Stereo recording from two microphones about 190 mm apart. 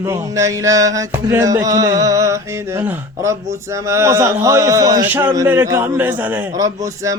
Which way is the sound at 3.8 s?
15° right (ahead or behind).